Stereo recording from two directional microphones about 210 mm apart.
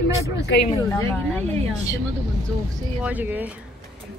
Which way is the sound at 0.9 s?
10° left (ahead or behind).